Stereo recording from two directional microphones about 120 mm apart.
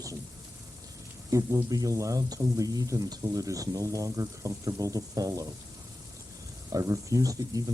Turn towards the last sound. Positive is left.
turn(degrees=-30)  # may be behind; listen again after turning